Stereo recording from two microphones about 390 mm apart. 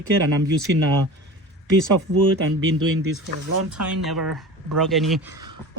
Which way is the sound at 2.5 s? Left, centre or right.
Right.